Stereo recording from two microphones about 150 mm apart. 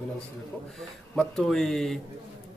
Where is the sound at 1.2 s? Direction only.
5° left (ahead or behind).